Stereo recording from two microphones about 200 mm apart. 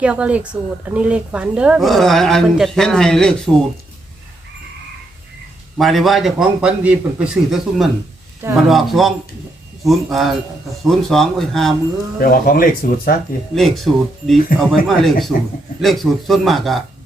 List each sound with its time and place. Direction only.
0.0 s speech: 5° right (ahead or behind)
5.7 s speech: centre (ahead or behind)
12.2 s speech: 45° left (ahead or behind)
13.6 s speech: centre (ahead or behind)